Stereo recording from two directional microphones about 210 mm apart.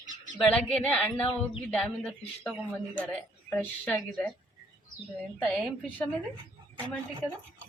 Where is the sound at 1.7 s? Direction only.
5° left (ahead or behind).